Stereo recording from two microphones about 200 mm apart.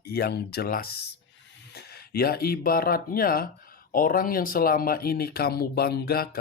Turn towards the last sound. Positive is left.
turn(degrees=50)  # may be behind; listen again after turning